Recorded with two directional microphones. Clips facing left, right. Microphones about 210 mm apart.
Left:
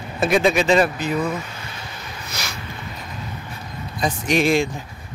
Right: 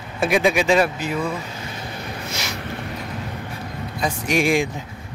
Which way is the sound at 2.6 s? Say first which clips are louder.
Right 5 dB; 60° right (ahead or behind).